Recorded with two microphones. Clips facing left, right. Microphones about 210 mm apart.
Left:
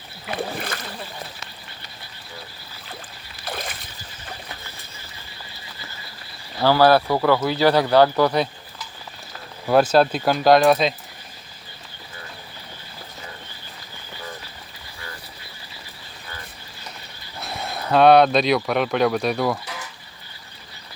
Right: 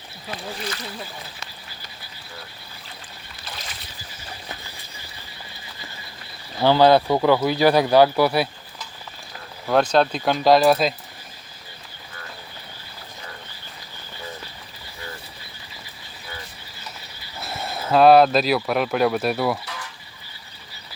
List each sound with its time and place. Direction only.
0.3 s speech: 55° left (ahead or behind)
3.4 s boat: 55° left (ahead or behind)
6.6 s speech: 20° right (ahead or behind)
9.6 s speech: 5° left (ahead or behind)
17.3 s speech: centre (ahead or behind)